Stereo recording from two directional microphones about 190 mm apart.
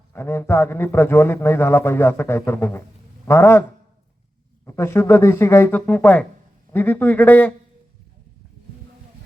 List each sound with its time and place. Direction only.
0.1 s a man's voice: 15° left (ahead or behind)
4.6 s a man's voice: 15° left (ahead or behind)